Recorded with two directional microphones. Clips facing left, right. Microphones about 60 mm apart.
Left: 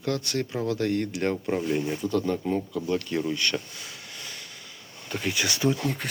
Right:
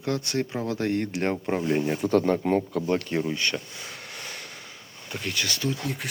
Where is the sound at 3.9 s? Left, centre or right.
Right.